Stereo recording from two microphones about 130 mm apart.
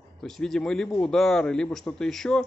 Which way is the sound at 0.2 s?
5° left (ahead or behind).